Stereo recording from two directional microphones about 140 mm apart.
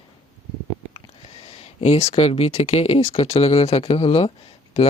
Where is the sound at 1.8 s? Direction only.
50° left (ahead or behind).